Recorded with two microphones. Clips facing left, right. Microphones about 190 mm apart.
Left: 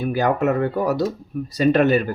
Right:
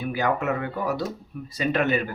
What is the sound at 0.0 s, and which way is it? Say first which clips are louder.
Speech: left 6 dB; 40° left (ahead or behind).